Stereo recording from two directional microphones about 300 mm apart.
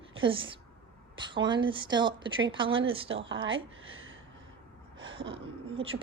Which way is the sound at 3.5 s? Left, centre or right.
Right.